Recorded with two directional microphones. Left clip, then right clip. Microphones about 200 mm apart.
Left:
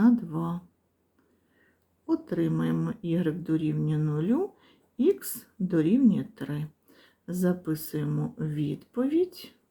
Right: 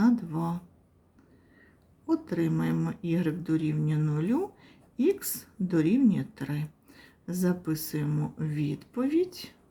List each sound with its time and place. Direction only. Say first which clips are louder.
0.0 s speech: left 2 dB; centre (ahead or behind)
2.0 s speech: left 1 dB; centre (ahead or behind)